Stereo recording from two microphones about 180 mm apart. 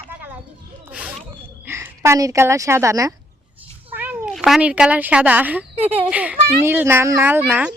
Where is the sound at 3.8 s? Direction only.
10° right (ahead or behind).